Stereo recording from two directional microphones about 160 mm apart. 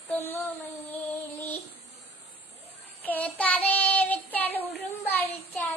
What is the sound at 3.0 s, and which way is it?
Child singing, 10° left (ahead or behind).